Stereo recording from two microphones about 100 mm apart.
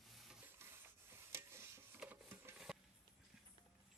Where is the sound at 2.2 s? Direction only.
25° right (ahead or behind).